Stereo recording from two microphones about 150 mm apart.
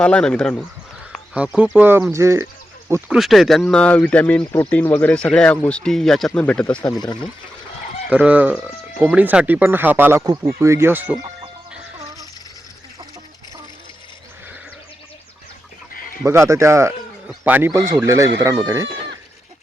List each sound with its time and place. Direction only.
0.0 s speech: 5° left (ahead or behind)
1.4 s speech: 10° right (ahead or behind)
3.1 s speech: centre (ahead or behind)
7.0 s speech: 30° left (ahead or behind)
8.1 s speech: 10° right (ahead or behind)
16.2 s speech: 20° right (ahead or behind)
18.0 s speech: 20° right (ahead or behind)